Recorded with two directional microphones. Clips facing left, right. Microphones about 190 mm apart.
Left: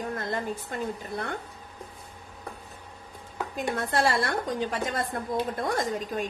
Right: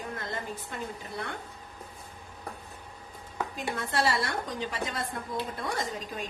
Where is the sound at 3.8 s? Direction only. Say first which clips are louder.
Left 3 dB; 50° left (ahead or behind).